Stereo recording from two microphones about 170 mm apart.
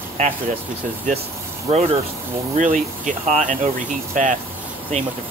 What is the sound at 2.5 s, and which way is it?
Speech, 50° right (ahead or behind).